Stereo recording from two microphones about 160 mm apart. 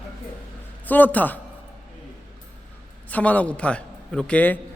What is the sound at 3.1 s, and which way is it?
A man's voice, 10° left (ahead or behind).